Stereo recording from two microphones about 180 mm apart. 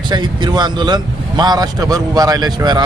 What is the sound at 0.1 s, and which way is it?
Speech, 25° right (ahead or behind).